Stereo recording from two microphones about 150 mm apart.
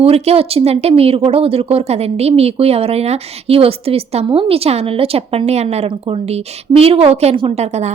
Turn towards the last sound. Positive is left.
turn(degrees=-45)  # may be behind; listen again after turning